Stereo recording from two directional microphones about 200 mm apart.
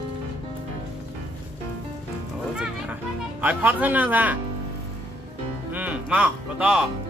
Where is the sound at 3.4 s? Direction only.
10° right (ahead or behind).